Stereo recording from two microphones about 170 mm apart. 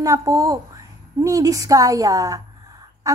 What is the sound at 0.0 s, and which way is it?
A woman's voice, 20° right (ahead or behind).